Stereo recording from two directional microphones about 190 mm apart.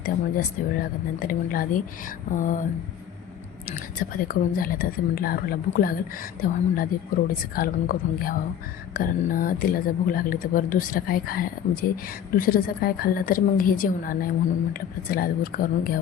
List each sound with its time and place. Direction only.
0.0 s a woman's voice: 50° left (ahead or behind)
3.7 s a woman's voice: 45° left (ahead or behind)